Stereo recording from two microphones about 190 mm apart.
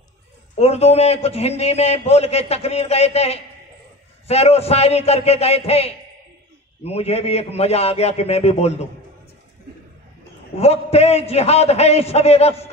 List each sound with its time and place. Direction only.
0.6 s a man's voice: 35° left (ahead or behind)
10.6 s a man's voice: 35° left (ahead or behind)